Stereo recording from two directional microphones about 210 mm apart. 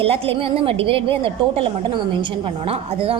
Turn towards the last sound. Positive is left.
turn(degrees=-25)  # may be behind; listen again after turning